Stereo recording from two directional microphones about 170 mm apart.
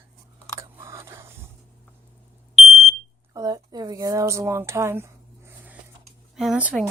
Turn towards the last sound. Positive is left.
turn(degrees=-5)  # may be behind; listen again after turning